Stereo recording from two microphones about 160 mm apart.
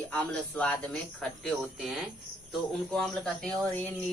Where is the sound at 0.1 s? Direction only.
10° left (ahead or behind).